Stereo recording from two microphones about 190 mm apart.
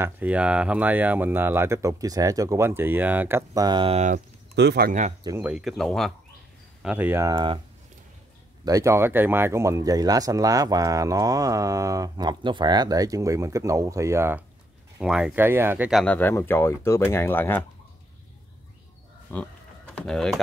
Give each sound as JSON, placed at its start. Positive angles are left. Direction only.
{"t": 0.0, "sound": "speech", "side_deg": -10}
{"t": 4.6, "sound": "speech", "side_deg": -60}
{"t": 5.4, "sound": "speech", "side_deg": -5}
{"t": 8.6, "sound": "speech", "side_deg": -15}
{"t": 15.9, "sound": "speech", "side_deg": 5}
{"t": 19.3, "sound": "speech", "side_deg": 10}